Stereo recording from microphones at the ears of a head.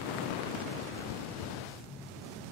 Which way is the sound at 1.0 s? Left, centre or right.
Left.